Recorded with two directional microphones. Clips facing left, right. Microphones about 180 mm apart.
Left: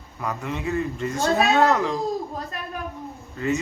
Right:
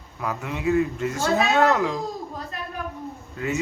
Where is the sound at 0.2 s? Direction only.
5° right (ahead or behind).